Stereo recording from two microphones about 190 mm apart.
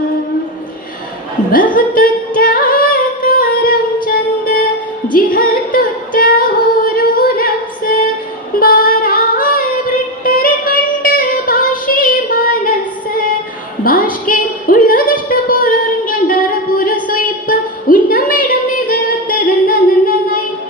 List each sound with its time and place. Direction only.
1.7 s singing: 50° left (ahead or behind)
6.8 s female singing: 50° left (ahead or behind)
10.2 s music: 50° left (ahead or behind)
13.8 s a sound: 50° left (ahead or behind)